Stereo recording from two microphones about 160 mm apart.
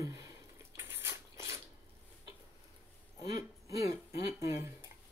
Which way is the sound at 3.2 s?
20° right (ahead or behind).